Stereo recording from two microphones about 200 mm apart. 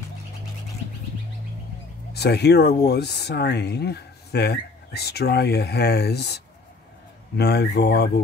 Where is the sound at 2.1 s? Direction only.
55° left (ahead or behind).